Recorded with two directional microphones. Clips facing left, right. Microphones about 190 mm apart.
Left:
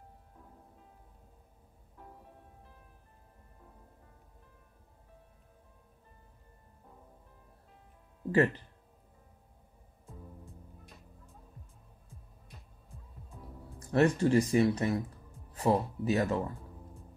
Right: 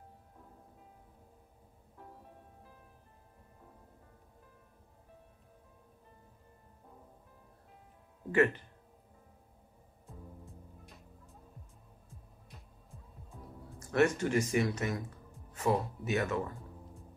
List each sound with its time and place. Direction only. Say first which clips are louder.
8.3 s speech: left 1 dB; 35° left (ahead or behind)
13.7 s speech: left 2 dB; 35° left (ahead or behind)